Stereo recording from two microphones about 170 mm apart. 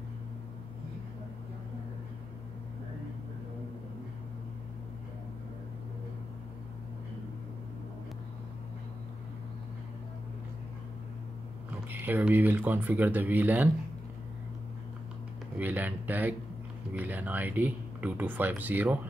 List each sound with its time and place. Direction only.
11.9 s speech: 10° right (ahead or behind)
15.5 s a sound: 10° right (ahead or behind)
16.9 s speech: 10° right (ahead or behind)